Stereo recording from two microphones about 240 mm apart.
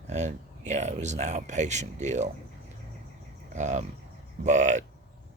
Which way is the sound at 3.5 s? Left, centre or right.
Right.